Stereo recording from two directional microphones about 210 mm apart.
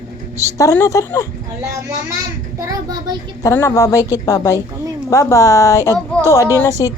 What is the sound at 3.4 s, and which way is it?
Speech, 15° left (ahead or behind).